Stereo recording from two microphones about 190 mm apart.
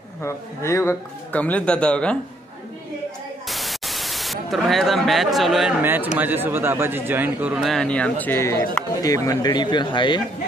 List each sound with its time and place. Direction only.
0.2 s speech: 15° left (ahead or behind)
3.4 s speech: centre (ahead or behind); by 10.2 s 25° left (ahead or behind)